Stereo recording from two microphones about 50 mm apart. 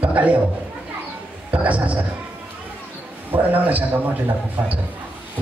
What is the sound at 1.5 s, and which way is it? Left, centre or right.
Speech, right.